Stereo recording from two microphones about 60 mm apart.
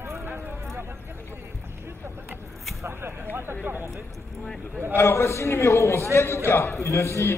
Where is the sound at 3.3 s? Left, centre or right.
Right.